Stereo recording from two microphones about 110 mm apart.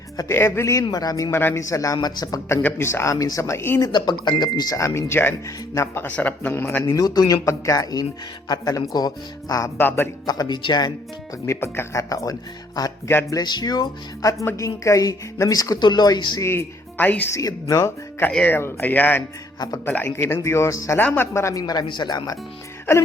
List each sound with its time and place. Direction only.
0.3 s a woman's voice: 20° left (ahead or behind)
2.6 s speech: 20° left (ahead or behind)
3.8 s a woman's voice: 40° left (ahead or behind)
4.9 s speech: 25° left (ahead or behind)
7.0 s a woman's voice: 35° left (ahead or behind); by 10.1 s 20° left (ahead or behind)
10.2 s a woman's voice: 40° left (ahead or behind)
11.4 s a woman's voice: 25° left (ahead or behind); by 16.4 s 40° left (ahead or behind)
16.4 s speech: 20° left (ahead or behind)
17.3 s a woman's voice: 35° left (ahead or behind)
18.2 s speech: 10° left (ahead or behind)
19.5 s speech: 35° left (ahead or behind)
19.8 s speech: 15° left (ahead or behind)
21.0 s speech: 15° left (ahead or behind)
21.3 s a woman's voice: 30° left (ahead or behind)